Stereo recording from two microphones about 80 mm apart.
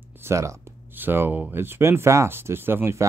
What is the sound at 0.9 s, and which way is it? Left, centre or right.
Speech, right.